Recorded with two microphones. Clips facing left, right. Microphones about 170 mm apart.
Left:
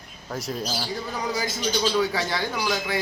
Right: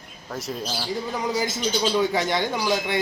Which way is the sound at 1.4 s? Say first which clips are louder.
Even; 20° right (ahead or behind).